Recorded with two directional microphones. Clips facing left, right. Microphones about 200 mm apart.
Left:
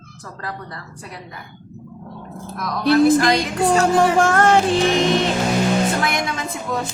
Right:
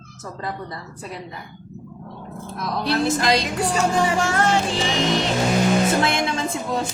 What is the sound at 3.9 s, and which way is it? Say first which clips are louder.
Speech: left 5 dB; 55° left (ahead or behind).